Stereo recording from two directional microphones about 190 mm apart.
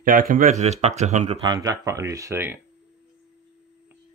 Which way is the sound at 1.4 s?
20° right (ahead or behind).